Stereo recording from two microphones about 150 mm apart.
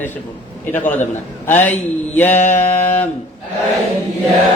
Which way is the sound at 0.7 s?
15° left (ahead or behind).